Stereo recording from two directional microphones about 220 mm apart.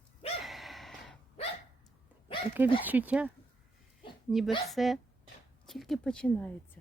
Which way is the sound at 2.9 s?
10° right (ahead or behind).